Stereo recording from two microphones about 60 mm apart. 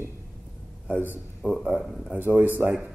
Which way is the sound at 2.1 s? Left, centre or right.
Right.